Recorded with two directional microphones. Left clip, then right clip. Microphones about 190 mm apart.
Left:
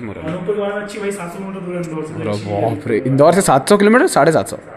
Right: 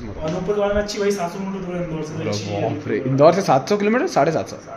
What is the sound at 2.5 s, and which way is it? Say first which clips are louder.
Speech: left 7 dB; 25° left (ahead or behind).